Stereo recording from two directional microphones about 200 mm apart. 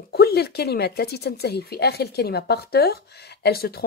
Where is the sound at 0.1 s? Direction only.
50° left (ahead or behind).